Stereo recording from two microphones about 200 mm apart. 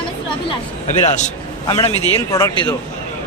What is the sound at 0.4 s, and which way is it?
Speech, 35° left (ahead or behind).